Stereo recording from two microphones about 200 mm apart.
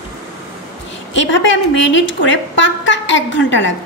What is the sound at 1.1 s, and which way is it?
A woman's voice, 65° left (ahead or behind).